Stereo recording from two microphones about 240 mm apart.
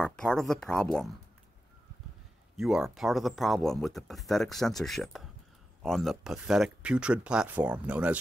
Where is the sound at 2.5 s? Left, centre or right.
Centre.